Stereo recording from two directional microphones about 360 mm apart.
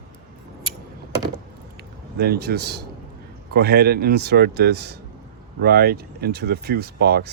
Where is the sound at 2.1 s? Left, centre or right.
Right.